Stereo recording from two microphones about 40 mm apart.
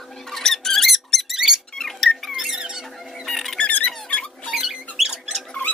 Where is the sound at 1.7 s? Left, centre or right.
Centre.